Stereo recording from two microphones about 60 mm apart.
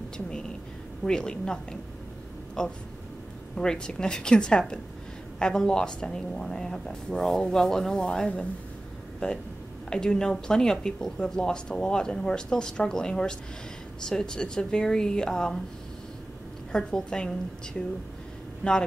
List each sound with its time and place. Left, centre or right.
1.0 s speech: centre
9.8 s speech: centre
16.7 s speech: centre